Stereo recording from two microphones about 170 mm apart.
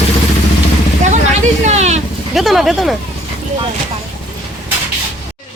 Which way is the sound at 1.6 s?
40° right (ahead or behind).